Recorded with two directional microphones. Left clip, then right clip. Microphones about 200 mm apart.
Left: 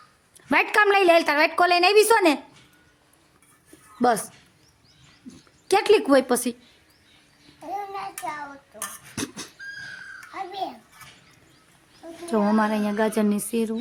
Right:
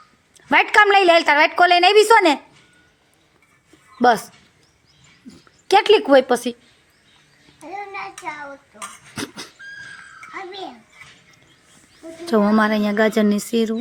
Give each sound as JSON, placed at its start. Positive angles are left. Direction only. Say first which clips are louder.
{"t": 0.3, "sound": "a woman's voice", "louder": "right 6 dB", "side_deg": 0}
{"t": 5.6, "sound": "a woman's voice", "louder": "right 5 dB", "side_deg": 0}
{"t": 9.1, "sound": "dog", "louder": "right 3 dB", "side_deg": 5}
{"t": 12.3, "sound": "a woman's voice", "louder": "right 5 dB", "side_deg": -20}